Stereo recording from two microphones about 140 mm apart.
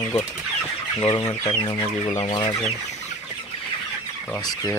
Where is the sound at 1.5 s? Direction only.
35° left (ahead or behind).